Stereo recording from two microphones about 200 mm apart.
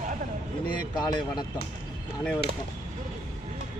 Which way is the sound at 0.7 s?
20° left (ahead or behind).